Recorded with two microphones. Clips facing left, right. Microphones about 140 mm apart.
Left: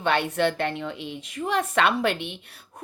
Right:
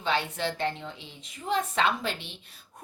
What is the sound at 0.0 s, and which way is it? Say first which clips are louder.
A woman's voice: left 6 dB; 60° left (ahead or behind).